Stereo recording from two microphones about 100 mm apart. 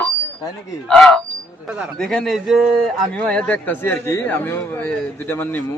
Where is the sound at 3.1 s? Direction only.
10° left (ahead or behind).